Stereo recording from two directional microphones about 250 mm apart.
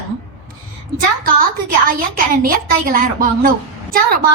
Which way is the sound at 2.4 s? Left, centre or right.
Right.